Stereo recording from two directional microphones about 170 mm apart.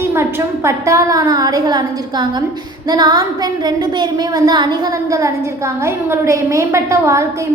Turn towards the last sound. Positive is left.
turn(degrees=-15)  # may be behind; listen again after turning